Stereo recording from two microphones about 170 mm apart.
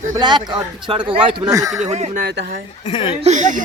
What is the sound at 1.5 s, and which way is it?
Speech, 20° right (ahead or behind).